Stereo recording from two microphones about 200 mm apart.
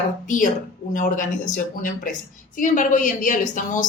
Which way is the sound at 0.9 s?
40° left (ahead or behind).